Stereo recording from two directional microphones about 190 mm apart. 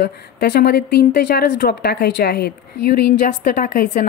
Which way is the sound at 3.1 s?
45° left (ahead or behind).